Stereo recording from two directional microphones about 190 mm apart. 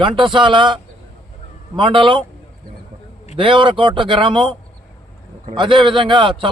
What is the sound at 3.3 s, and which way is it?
A man's voice, 25° right (ahead or behind).